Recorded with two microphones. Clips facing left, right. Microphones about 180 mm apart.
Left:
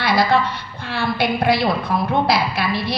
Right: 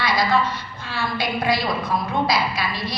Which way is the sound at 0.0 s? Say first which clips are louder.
Left 3 dB; 60° left (ahead or behind).